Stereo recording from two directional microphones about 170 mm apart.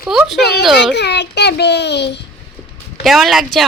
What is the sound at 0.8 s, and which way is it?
A child's voice, 85° left.